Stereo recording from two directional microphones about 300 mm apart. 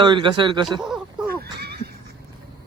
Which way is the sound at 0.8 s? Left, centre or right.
Centre.